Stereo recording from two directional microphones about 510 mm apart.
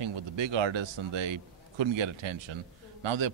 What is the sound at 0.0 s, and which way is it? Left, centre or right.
A man's voice, right.